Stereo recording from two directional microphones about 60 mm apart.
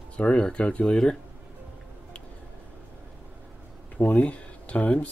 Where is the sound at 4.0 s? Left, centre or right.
Left.